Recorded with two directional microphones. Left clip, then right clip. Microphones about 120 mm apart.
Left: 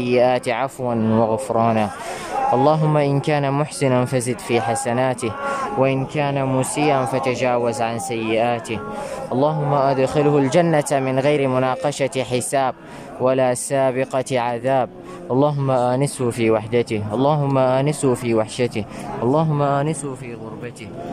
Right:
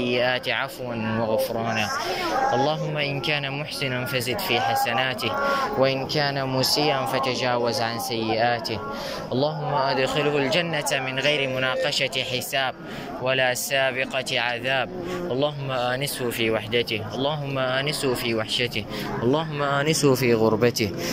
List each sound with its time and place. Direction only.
0.1 s speech: 40° left (ahead or behind)
5.5 s speech: 25° left (ahead or behind)
6.7 s speech: 35° left (ahead or behind)
19.3 s speech: 25° left (ahead or behind)
19.8 s speech: 5° left (ahead or behind)